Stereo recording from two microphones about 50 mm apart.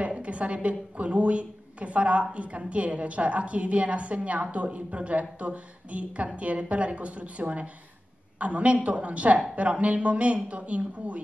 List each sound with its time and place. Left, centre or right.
0.0 s a woman's voice: right